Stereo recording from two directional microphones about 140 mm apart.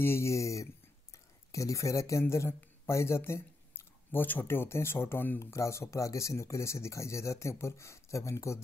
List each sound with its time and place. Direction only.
0.0 s speech: 20° left (ahead or behind)